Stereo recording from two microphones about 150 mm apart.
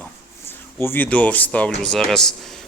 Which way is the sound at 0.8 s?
15° left (ahead or behind).